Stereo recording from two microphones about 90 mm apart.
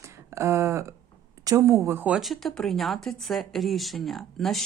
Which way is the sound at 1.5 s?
35° right (ahead or behind).